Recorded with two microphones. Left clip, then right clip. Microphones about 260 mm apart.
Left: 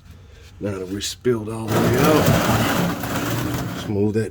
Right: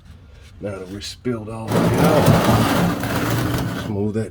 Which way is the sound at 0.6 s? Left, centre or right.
Left.